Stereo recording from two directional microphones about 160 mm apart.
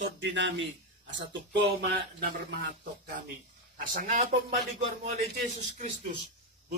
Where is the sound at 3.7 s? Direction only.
60° right (ahead or behind).